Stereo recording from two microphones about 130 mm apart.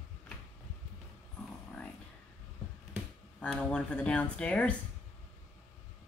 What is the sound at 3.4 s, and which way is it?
Speech, 10° left (ahead or behind).